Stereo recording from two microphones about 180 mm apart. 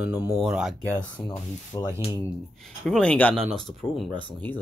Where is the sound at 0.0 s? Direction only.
10° right (ahead or behind).